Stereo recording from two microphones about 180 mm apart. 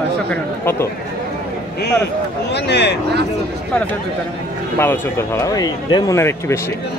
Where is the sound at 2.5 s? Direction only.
70° left (ahead or behind).